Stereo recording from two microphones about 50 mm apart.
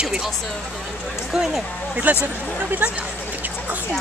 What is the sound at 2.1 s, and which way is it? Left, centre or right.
Speech, right.